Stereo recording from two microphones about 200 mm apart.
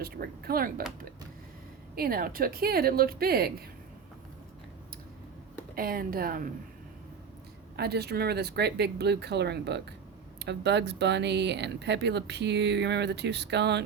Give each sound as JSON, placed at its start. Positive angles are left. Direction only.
{"t": 0.0, "sound": "a woman's voice", "side_deg": -50}
{"t": 2.0, "sound": "a woman's voice", "side_deg": -50}
{"t": 5.7, "sound": "a woman's voice", "side_deg": -45}
{"t": 7.8, "sound": "speech", "side_deg": -55}